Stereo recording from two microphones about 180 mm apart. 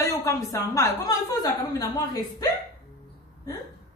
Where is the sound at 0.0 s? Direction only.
15° left (ahead or behind).